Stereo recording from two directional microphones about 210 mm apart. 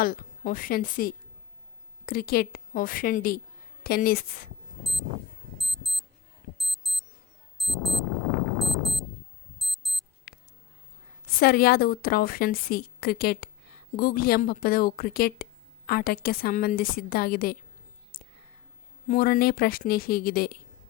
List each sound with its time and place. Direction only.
0.0 s a woman's voice: 45° left (ahead or behind)
5.5 s alarm clock: centre (ahead or behind)
7.6 s speech: centre (ahead or behind)
8.5 s clock: centre (ahead or behind)
9.6 s alarm clock: centre (ahead or behind)
10.3 s a sound: 45° left (ahead or behind)
11.3 s a woman's voice: 45° left (ahead or behind)
18.1 s whispering: 40° left (ahead or behind)
19.0 s a woman's voice: 40° left (ahead or behind)